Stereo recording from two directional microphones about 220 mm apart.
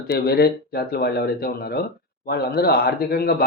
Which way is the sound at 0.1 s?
45° left (ahead or behind).